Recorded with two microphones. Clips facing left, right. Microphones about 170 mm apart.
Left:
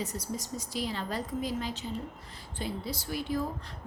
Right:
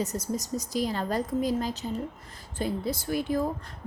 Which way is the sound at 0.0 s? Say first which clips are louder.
Right 5 dB; 45° right (ahead or behind).